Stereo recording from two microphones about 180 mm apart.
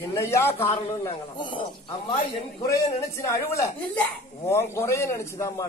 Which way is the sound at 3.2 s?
15° left (ahead or behind).